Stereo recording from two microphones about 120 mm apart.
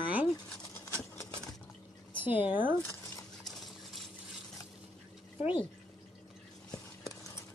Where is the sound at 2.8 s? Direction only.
25° left (ahead or behind).